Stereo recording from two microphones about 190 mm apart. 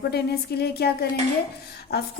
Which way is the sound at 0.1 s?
55° left (ahead or behind).